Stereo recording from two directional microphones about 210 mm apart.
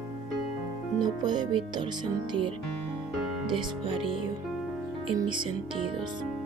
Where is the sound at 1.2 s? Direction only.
20° right (ahead or behind).